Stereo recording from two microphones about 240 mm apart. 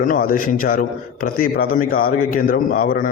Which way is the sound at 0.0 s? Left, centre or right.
Left.